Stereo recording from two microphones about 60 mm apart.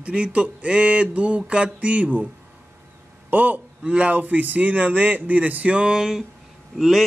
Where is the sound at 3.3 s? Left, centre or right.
Right.